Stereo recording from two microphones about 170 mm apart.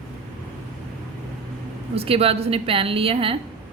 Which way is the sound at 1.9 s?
35° right (ahead or behind).